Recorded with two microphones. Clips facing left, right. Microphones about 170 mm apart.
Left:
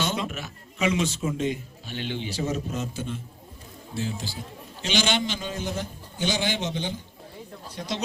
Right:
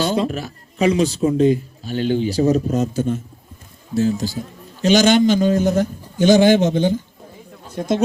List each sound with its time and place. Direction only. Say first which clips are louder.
0.0 s a man's voice: right 9 dB; 35° right (ahead or behind); by 8.0 s 50° right (ahead or behind)